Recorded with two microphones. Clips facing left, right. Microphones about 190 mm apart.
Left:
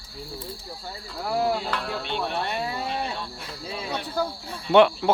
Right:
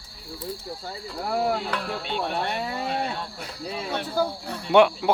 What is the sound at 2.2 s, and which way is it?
Speech, 55° right (ahead or behind).